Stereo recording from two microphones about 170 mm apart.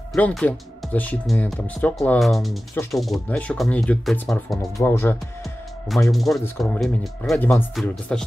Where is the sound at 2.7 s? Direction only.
15° left (ahead or behind).